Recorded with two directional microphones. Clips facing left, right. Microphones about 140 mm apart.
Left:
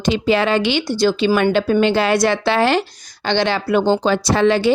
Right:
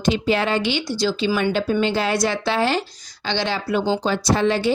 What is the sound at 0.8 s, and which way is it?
A woman's voice, 55° left (ahead or behind).